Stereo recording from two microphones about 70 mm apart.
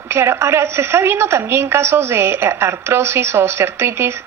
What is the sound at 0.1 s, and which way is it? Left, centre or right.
Speech, right.